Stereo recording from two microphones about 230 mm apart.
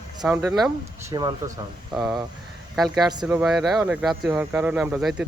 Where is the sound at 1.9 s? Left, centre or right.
Centre.